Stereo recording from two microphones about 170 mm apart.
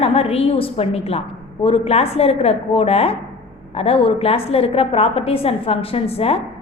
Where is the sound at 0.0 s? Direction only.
35° left (ahead or behind).